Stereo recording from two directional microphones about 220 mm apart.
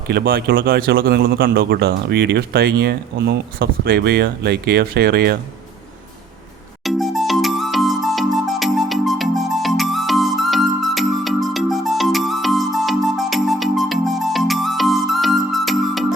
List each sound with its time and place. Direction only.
0.1 s speech: 45° right (ahead or behind)
6.8 s music: centre (ahead or behind)